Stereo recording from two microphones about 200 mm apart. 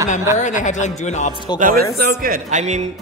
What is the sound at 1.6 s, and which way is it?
A man's voice, 50° right (ahead or behind).